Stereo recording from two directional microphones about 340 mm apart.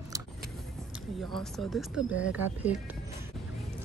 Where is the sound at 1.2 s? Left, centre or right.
Centre.